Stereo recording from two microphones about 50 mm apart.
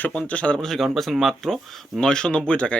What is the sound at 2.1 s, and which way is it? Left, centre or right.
Speech, centre.